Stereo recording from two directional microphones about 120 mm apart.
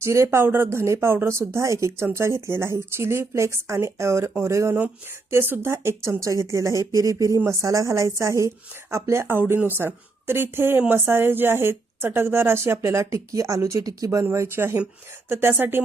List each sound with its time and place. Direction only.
0.0 s speech: 25° right (ahead or behind)